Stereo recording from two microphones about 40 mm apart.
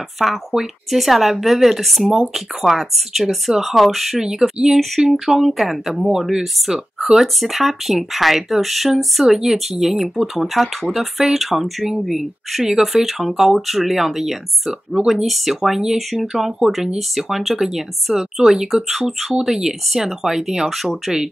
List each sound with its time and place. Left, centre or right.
0.2 s speech: centre